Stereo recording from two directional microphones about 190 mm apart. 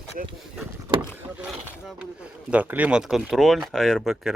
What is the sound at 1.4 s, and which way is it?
Speech, 5° right (ahead or behind).